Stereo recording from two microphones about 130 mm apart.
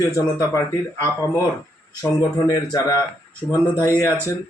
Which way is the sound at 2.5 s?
25° left (ahead or behind).